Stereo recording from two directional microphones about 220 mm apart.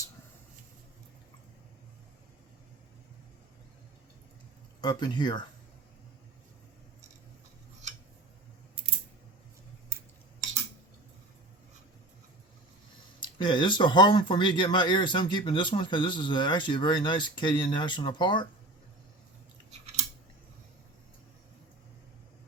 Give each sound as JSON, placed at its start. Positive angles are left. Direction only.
{"t": 4.8, "sound": "speech", "side_deg": 20}
{"t": 9.9, "sound": "cutlery", "side_deg": -10}
{"t": 13.1, "sound": "speech", "side_deg": 20}